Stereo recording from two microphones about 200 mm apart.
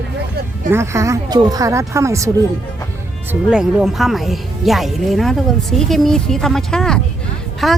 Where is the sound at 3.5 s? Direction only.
5° right (ahead or behind).